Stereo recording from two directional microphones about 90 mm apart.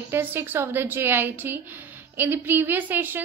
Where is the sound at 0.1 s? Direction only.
25° right (ahead or behind).